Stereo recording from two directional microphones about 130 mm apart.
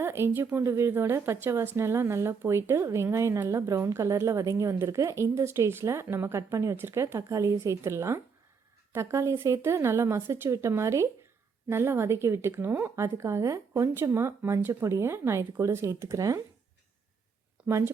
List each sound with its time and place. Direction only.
0.0 s speech: 20° right (ahead or behind)
17.7 s speech: 20° right (ahead or behind)